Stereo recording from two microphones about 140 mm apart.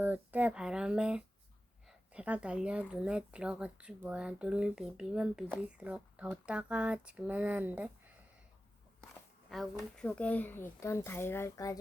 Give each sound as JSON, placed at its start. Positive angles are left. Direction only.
{"t": 0.0, "sound": "speech", "side_deg": -10}
{"t": 9.5, "sound": "speech", "side_deg": 0}